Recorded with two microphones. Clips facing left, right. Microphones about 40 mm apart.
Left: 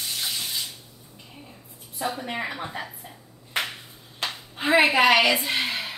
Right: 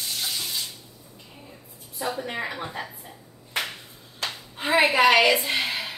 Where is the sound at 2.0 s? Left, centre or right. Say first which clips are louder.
Even; centre.